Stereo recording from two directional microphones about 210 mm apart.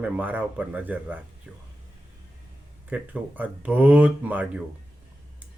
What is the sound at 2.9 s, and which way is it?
Speech, 5° right (ahead or behind).